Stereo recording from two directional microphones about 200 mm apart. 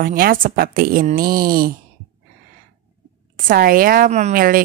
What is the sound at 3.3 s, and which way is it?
A woman's voice, 45° right (ahead or behind).